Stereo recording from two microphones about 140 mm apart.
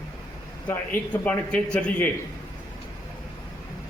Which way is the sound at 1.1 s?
10° left (ahead or behind).